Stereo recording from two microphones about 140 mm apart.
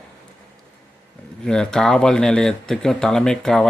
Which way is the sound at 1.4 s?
5° left (ahead or behind).